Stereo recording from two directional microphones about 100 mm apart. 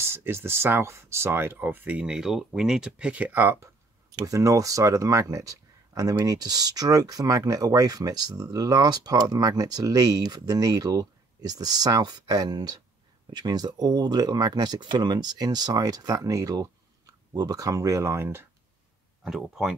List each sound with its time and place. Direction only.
0.0 s speech: 25° right (ahead or behind)
4.1 s speech: 35° right (ahead or behind)
19.2 s speech: 5° right (ahead or behind)